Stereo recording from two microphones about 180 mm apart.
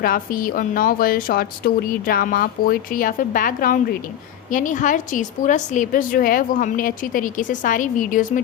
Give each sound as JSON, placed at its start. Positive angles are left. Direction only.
{"t": 0.0, "sound": "speech", "side_deg": 50}